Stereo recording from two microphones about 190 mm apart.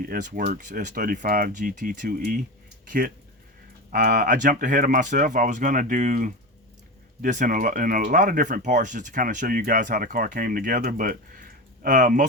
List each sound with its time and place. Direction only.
0.0 s speech: 50° right (ahead or behind)
3.9 s speech: 45° right (ahead or behind)